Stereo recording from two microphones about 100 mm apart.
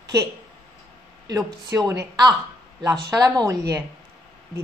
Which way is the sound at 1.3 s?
35° right (ahead or behind).